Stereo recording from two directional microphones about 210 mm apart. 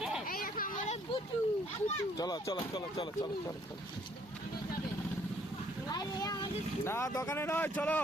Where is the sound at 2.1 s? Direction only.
20° left (ahead or behind).